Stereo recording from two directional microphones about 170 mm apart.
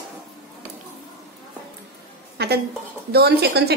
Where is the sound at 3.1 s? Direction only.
70° right (ahead or behind).